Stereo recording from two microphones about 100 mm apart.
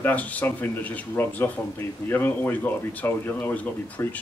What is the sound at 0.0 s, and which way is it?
Speech, 15° left (ahead or behind).